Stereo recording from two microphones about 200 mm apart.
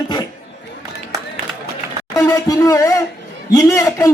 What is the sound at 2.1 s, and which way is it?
Speech, 15° left (ahead or behind).